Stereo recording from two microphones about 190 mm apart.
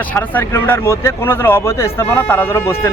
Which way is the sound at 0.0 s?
10° left (ahead or behind).